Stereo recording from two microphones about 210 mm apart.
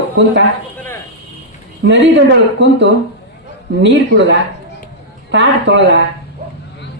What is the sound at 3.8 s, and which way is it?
Speech, 60° right (ahead or behind).